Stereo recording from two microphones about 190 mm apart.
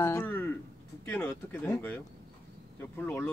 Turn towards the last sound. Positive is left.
turn(degrees=10)  # may be behind; listen again after turning